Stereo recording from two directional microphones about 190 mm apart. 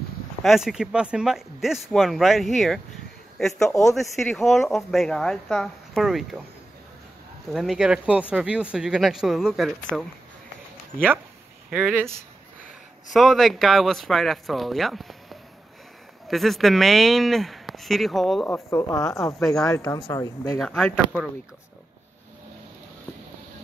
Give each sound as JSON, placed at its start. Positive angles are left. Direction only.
{"t": 0.4, "sound": "speech", "side_deg": 0}
{"t": 7.5, "sound": "speech", "side_deg": 0}
{"t": 11.7, "sound": "speech", "side_deg": -5}
{"t": 13.1, "sound": "speech", "side_deg": 0}
{"t": 19.3, "sound": "speech", "side_deg": 0}
{"t": 19.7, "sound": "speech", "side_deg": 15}
{"t": 20.5, "sound": "speech", "side_deg": 5}